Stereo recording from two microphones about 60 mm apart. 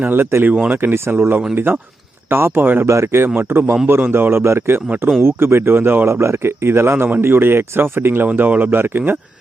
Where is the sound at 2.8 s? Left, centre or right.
Right.